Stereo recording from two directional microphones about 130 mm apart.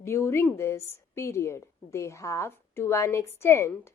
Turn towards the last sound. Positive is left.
turn(degrees=20)  # may be behind; listen again after turning